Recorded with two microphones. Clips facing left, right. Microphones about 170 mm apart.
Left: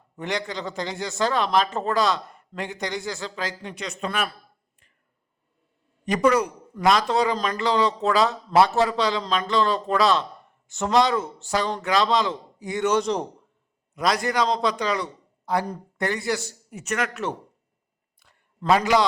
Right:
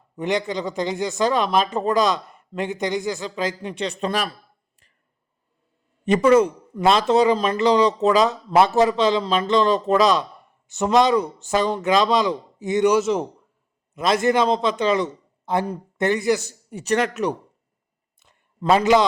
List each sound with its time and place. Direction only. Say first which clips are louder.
0.2 s a man's voice: right 6 dB; 20° right (ahead or behind)
3.8 s speech: right 3 dB; 30° right (ahead or behind)
6.1 s a man's voice: right 5 dB; 25° right (ahead or behind)
13.0 s a man's voice: right 3 dB; 5° right (ahead or behind)
13.9 s a man's voice: right 5 dB; 25° right (ahead or behind)
16.6 s speech: right 7 dB; 35° right (ahead or behind)
18.2 s a sound: right 4 dB; 20° right (ahead or behind)